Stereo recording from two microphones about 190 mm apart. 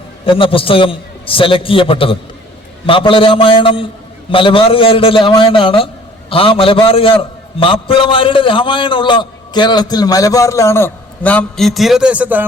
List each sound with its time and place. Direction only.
0.3 s a man's voice: 30° left (ahead or behind); by 12.5 s 10° right (ahead or behind)